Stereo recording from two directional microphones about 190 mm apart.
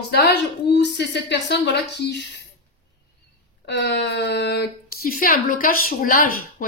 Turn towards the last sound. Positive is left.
turn(degrees=50)  # may be behind; listen again after turning